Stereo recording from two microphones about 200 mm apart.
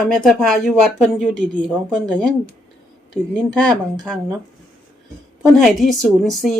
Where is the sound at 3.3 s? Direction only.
5° left (ahead or behind).